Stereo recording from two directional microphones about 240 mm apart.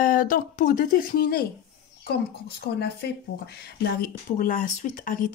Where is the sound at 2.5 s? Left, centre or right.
Left.